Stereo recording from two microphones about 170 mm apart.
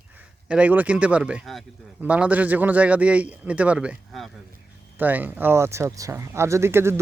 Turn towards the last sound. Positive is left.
turn(degrees=-15)  # may be behind; listen again after turning